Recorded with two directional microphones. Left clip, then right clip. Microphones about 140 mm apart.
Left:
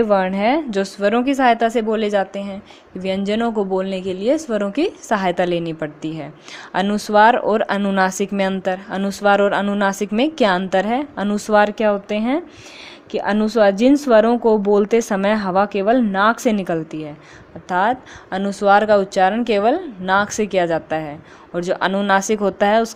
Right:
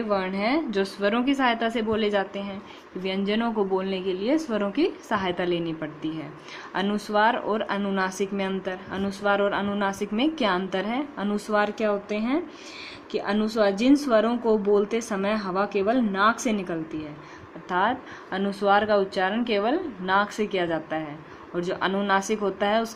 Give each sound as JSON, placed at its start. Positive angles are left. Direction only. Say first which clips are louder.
{"t": 0.1, "sound": "a woman's voice", "louder": "left 9 dB", "side_deg": 55}
{"t": 4.4, "sound": "speech", "louder": "left 5 dB", "side_deg": 40}
{"t": 17.7, "sound": "a woman's voice", "louder": "left 6 dB", "side_deg": 55}